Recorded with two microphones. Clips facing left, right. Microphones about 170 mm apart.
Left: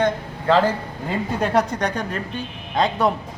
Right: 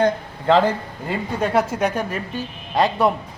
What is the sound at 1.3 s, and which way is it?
A man's voice, 5° right (ahead or behind).